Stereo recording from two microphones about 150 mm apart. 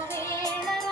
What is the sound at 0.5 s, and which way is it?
Music, centre (ahead or behind).